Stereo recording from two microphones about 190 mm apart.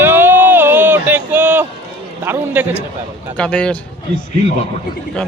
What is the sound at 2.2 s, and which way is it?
Speech, 10° right (ahead or behind).